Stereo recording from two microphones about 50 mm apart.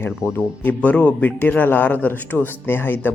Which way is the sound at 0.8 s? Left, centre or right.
Left.